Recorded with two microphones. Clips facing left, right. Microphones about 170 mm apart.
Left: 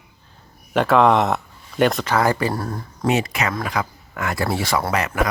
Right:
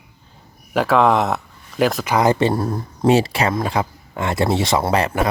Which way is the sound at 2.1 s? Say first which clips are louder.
Right 3 dB; 20° right (ahead or behind).